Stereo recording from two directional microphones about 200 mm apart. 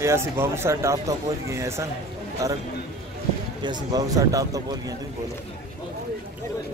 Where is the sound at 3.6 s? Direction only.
20° right (ahead or behind).